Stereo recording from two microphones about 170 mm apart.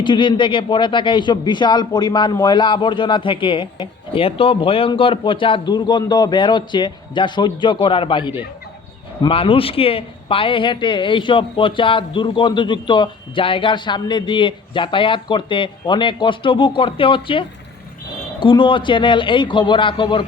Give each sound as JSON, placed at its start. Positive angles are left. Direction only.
{"t": 0.0, "sound": "speech", "side_deg": 30}